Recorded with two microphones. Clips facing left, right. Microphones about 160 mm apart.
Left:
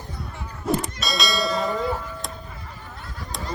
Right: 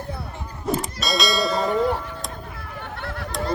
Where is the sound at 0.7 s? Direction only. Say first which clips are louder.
Right 1 dB; centre (ahead or behind).